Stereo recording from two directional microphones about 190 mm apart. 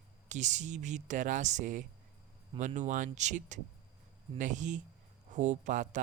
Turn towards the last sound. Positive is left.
turn(degrees=-40)  # may be behind; listen again after turning